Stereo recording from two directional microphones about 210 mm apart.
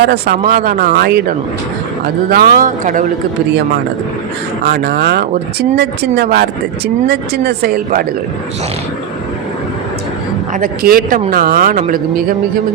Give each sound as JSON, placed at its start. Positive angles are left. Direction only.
{"t": 0.0, "sound": "speech", "side_deg": -45}
{"t": 4.7, "sound": "speech", "side_deg": -50}
{"t": 10.5, "sound": "speech", "side_deg": -45}